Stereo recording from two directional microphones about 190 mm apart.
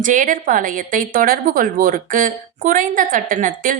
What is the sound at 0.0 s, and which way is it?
A woman's voice, 45° right (ahead or behind).